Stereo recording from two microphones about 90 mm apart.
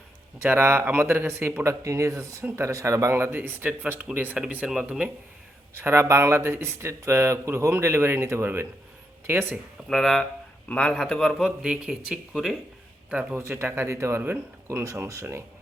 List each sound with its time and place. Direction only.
0.4 s speech: 25° right (ahead or behind)
5.7 s speech: 30° right (ahead or behind)
9.9 s a man's voice: centre (ahead or behind)
11.4 s speech: 10° right (ahead or behind)
13.3 s speech: 25° right (ahead or behind)